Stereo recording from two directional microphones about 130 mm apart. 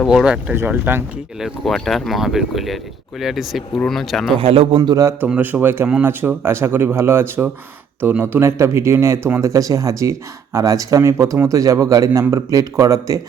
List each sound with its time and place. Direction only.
0.0 s speech: 5° right (ahead or behind)
0.5 s speech: 15° right (ahead or behind)
1.4 s speech: centre (ahead or behind)
4.4 s a man's voice: 45° right (ahead or behind)
4.8 s speech: 30° right (ahead or behind)
5.2 s speech: 15° right (ahead or behind)